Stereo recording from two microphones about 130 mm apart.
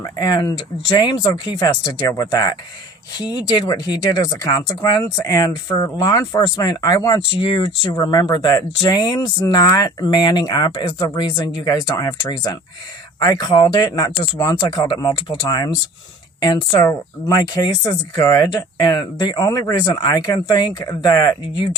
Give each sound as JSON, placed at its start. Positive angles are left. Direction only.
{"t": 0.0, "sound": "speech", "side_deg": 30}
{"t": 3.7, "sound": "speech", "side_deg": 30}
{"t": 13.1, "sound": "speech", "side_deg": 30}